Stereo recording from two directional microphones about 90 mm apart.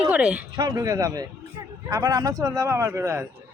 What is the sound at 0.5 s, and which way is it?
A man's voice, 45° right (ahead or behind).